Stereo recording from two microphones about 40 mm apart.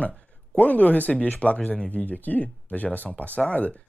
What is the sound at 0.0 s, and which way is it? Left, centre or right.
Speech, left.